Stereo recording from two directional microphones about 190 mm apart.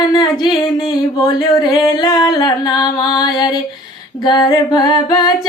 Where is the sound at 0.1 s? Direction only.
20° left (ahead or behind).